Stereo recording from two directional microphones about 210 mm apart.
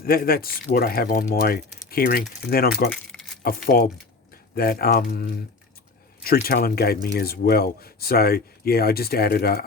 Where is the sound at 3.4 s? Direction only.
40° left (ahead or behind).